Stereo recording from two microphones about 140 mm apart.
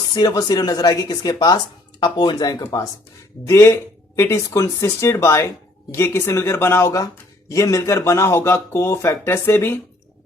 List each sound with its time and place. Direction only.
0.1 s speech: 30° left (ahead or behind)